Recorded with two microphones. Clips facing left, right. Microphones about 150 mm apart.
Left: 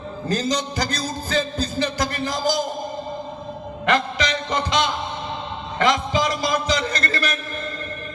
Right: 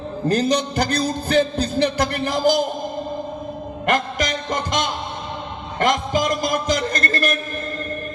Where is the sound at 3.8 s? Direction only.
45° right (ahead or behind).